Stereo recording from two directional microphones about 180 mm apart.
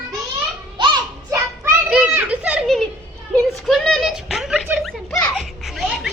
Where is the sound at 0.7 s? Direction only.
25° right (ahead or behind).